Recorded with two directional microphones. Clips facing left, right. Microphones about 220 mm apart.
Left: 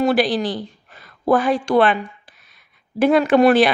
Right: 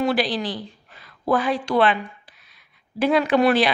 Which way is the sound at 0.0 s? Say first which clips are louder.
Left 4 dB; 45° left (ahead or behind).